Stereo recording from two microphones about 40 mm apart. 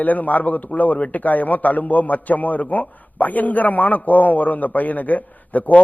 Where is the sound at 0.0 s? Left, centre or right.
Left.